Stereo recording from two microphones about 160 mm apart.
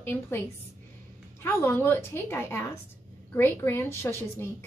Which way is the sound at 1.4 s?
15° left (ahead or behind).